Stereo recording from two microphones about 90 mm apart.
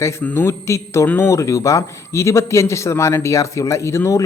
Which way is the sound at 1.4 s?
35° left (ahead or behind).